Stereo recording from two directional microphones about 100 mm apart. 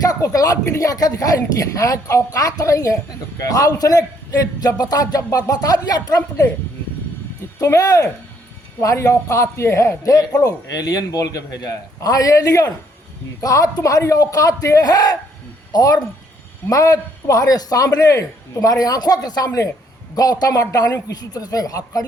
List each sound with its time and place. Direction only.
0.0 s speech: 35° left (ahead or behind)
7.6 s speech: 35° left (ahead or behind)